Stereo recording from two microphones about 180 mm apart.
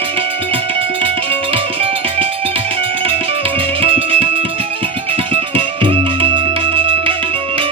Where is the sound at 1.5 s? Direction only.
30° right (ahead or behind).